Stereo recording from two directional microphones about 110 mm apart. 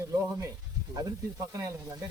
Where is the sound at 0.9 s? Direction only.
35° right (ahead or behind).